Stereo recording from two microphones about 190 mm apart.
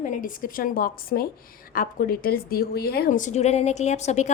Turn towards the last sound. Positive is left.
turn(degrees=35)  # may be behind; listen again after turning